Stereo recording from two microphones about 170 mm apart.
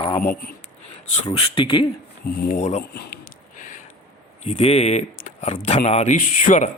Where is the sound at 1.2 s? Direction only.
30° left (ahead or behind).